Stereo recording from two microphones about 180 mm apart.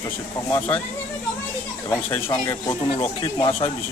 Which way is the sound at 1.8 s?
25° left (ahead or behind).